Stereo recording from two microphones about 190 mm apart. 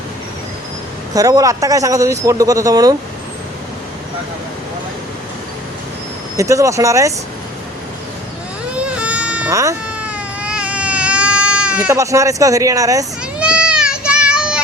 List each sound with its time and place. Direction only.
1.1 s a man's voice: 20° right (ahead or behind)
6.3 s a man's voice: 15° right (ahead or behind)
8.7 s baby cry: 5° right (ahead or behind)
9.5 s sheep: 15° right (ahead or behind)
10.1 s baby cry: 5° right (ahead or behind)
11.9 s a man's voice: 15° right (ahead or behind)
13.4 s children playing: 5° right (ahead or behind)